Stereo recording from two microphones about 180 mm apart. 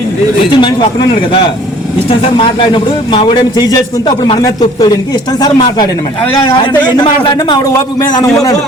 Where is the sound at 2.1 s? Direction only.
30° left (ahead or behind).